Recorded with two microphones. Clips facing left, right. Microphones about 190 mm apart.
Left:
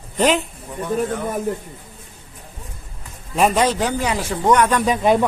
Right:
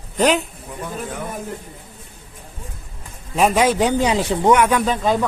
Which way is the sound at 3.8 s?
20° right (ahead or behind).